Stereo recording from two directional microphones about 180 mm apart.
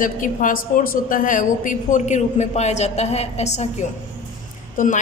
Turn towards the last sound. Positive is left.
turn(degrees=45)  # may be behind; listen again after turning